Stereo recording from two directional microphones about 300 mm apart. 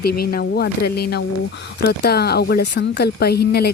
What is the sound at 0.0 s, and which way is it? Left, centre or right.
Speech, left.